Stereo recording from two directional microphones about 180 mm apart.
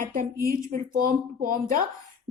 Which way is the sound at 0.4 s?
50° right (ahead or behind).